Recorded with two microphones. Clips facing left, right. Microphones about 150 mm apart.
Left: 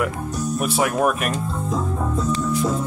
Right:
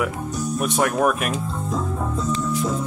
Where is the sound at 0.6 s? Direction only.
5° left (ahead or behind).